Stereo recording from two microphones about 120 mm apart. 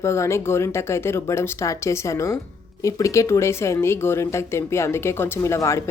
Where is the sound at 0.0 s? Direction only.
25° left (ahead or behind).